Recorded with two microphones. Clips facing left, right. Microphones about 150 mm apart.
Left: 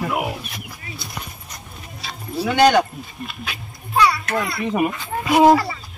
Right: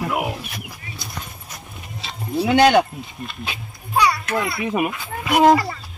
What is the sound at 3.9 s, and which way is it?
A child's voice, 5° right (ahead or behind).